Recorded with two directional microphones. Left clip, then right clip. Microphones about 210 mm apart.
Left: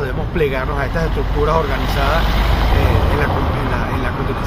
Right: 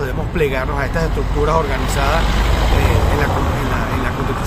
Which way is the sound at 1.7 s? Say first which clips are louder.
Even; 45° left (ahead or behind).